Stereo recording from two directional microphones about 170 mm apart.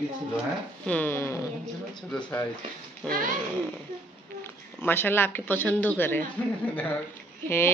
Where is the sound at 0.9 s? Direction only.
10° left (ahead or behind).